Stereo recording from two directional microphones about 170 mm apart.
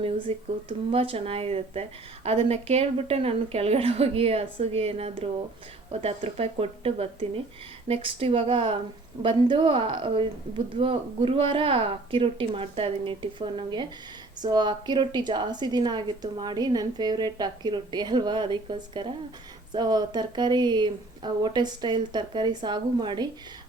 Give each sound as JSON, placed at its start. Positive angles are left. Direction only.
{"t": 0.0, "sound": "a woman's voice", "side_deg": -30}